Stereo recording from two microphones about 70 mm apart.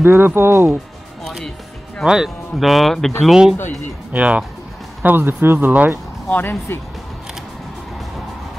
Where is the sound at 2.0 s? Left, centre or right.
Centre.